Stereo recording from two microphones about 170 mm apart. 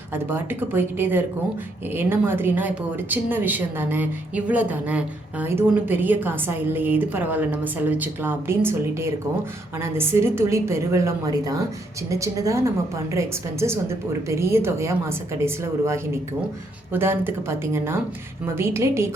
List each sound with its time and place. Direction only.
0.1 s a woman's voice: 10° right (ahead or behind)